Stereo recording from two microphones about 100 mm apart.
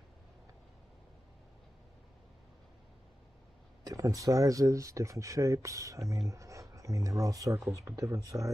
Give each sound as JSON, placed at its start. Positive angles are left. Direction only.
{"t": 3.8, "sound": "speech", "side_deg": -35}